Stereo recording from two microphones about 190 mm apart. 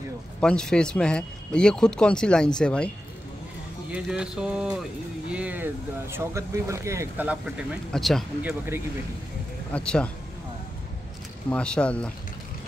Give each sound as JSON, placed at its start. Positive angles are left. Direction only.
{"t": 0.4, "sound": "speech", "side_deg": 5}
{"t": 3.9, "sound": "speech", "side_deg": -5}
{"t": 9.7, "sound": "speech", "side_deg": 5}
{"t": 11.5, "sound": "speech", "side_deg": 5}